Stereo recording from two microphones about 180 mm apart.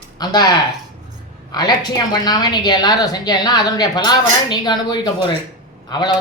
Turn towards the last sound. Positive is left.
turn(degrees=25)  # may be behind; listen again after turning